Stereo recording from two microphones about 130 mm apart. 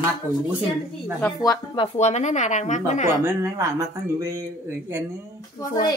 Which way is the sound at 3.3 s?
25° right (ahead or behind).